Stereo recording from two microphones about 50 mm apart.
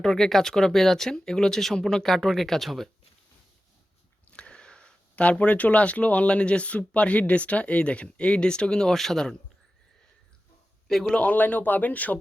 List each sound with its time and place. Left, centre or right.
0.0 s speech: centre
4.3 s a sound: centre
5.1 s speech: left; by 9.3 s centre
10.8 s a man's voice: centre
11.1 s speech: left